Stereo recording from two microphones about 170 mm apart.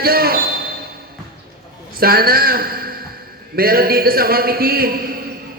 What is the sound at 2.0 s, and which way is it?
A man's voice, 60° right (ahead or behind).